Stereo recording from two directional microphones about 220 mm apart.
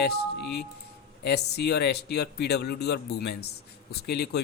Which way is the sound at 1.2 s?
50° left (ahead or behind).